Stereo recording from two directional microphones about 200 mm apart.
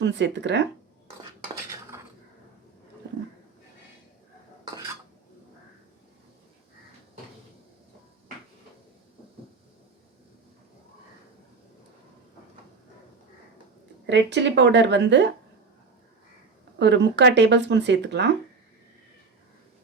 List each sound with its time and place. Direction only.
0.0 s speech: 60° right (ahead or behind)
14.1 s speech: 60° right (ahead or behind)
16.7 s speech: 60° right (ahead or behind)